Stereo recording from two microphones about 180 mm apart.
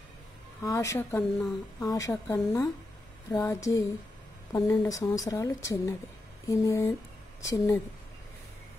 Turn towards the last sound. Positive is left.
turn(degrees=15)  # may be behind; listen again after turning